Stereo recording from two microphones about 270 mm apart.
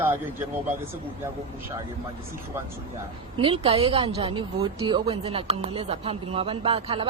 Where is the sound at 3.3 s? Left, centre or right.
Centre.